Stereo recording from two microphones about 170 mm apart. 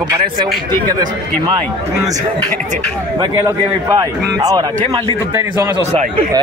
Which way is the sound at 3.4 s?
20° right (ahead or behind).